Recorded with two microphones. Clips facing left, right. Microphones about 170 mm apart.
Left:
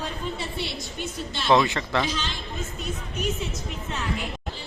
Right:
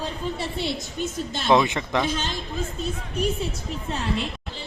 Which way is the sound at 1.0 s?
45° right (ahead or behind).